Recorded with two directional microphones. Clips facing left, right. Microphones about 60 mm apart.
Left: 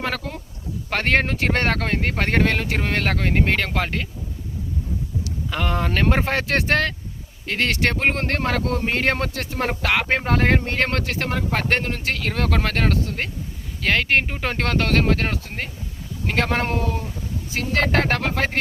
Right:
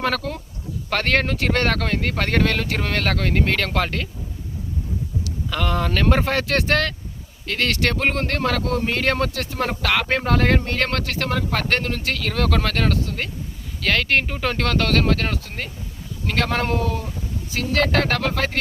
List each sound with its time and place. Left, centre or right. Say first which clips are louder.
0.0 s speech: right 3 dB; centre
5.2 s speech: right 1 dB; left
13.8 s speech: even; left